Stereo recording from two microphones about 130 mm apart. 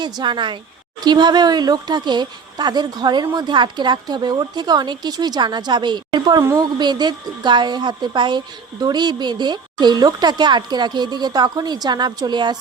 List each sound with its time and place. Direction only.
0.0 s a woman's voice: 35° right (ahead or behind)